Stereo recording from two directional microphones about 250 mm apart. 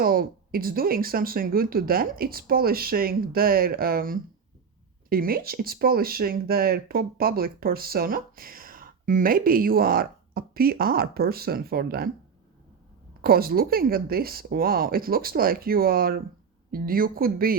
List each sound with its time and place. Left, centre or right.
0.0 s speech: right
13.2 s speech: right